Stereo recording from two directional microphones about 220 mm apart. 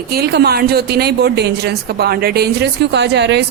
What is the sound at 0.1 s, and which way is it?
A woman's voice, 45° right (ahead or behind).